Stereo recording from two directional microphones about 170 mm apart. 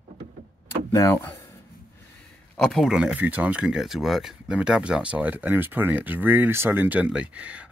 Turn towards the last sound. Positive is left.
turn(degrees=-5)  # may be behind; listen again after turning